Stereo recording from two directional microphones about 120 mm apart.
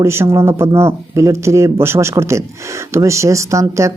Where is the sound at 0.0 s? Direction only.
20° right (ahead or behind).